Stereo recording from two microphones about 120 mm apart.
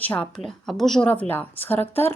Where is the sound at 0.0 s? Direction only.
10° left (ahead or behind).